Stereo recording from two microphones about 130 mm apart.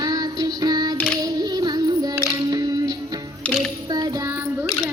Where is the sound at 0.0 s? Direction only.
30° right (ahead or behind).